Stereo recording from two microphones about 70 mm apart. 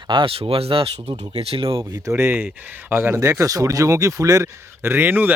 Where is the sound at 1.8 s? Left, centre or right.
Right.